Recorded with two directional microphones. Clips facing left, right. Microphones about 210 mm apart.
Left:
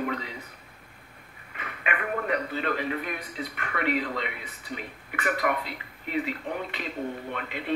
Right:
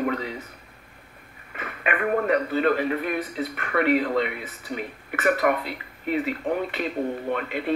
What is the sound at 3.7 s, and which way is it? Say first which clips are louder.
Speech: right 7 dB; 50° right (ahead or behind).